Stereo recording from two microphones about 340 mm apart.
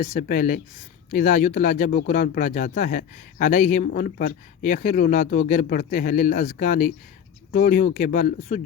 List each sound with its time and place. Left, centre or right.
0.0 s speech: left